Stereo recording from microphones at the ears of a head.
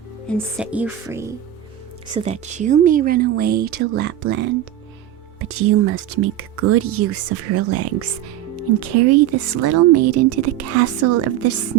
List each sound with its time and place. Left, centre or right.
2.0 s speech: right